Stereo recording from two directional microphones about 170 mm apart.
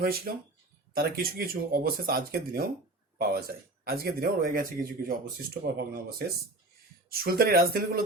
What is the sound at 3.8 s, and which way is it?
Speech, 65° right (ahead or behind).